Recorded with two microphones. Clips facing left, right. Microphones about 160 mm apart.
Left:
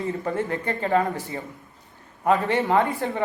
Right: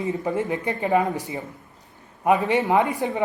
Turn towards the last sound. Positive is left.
turn(degrees=-15)  # may be behind; listen again after turning